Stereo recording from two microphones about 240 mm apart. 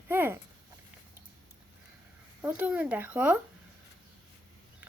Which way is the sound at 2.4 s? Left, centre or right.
Centre.